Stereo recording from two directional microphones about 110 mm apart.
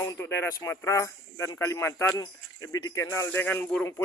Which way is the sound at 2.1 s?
35° left (ahead or behind).